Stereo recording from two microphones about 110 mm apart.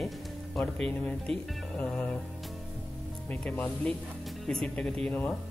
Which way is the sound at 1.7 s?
10° left (ahead or behind).